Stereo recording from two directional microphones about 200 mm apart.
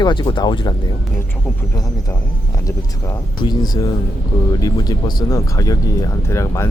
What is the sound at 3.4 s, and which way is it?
Speech, 25° left (ahead or behind).